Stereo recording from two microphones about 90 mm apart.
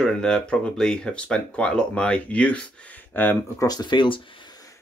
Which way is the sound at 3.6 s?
50° left (ahead or behind).